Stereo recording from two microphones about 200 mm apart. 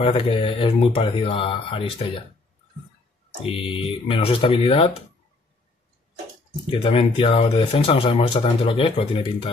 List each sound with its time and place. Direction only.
0.0 s speech: 25° left (ahead or behind)
3.5 s speech: 25° left (ahead or behind)
6.7 s speech: 25° left (ahead or behind)